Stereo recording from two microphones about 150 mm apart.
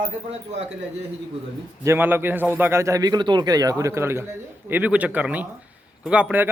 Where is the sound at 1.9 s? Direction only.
15° right (ahead or behind).